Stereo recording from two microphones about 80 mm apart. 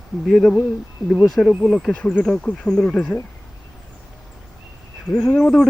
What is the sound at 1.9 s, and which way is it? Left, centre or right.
Speech, centre.